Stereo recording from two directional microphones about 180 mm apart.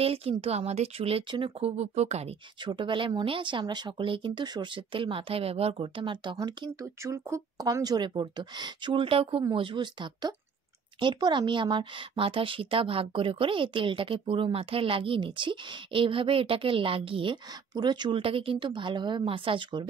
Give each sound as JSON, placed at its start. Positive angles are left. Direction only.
{"t": 0.0, "sound": "speech", "side_deg": -30}